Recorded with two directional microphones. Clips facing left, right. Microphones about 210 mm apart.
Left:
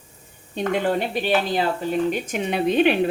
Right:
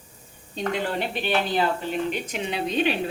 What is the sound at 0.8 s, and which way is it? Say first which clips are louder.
A woman's voice: left 5 dB; 40° left (ahead or behind).